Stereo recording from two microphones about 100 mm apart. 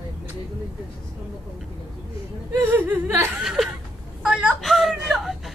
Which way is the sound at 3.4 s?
5° right (ahead or behind).